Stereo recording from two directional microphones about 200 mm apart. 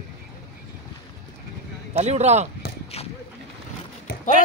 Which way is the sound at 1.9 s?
35° right (ahead or behind).